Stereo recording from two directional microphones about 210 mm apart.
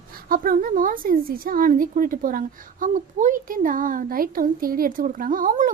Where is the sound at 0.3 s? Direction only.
40° right (ahead or behind).